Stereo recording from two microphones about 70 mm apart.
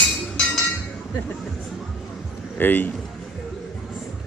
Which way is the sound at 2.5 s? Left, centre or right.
Left.